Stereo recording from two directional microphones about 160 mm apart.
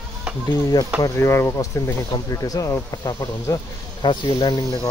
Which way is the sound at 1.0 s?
15° left (ahead or behind).